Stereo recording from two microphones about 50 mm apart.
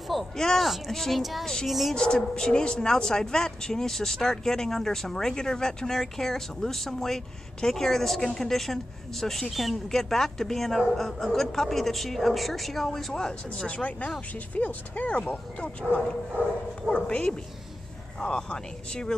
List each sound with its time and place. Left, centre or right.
0.1 s a woman's voice: centre
1.4 s a woman's voice: centre
1.7 s a woman's voice: centre
2.0 s a woman's voice: centre
13.8 s a woman's voice: left